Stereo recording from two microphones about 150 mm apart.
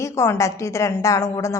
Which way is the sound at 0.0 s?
20° left (ahead or behind).